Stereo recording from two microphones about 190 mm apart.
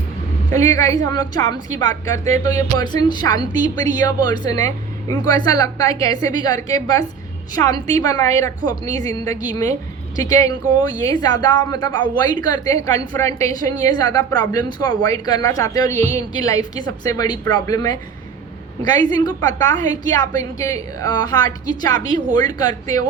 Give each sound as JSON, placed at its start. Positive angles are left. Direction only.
{"t": 0.5, "sound": "a woman's voice", "side_deg": 20}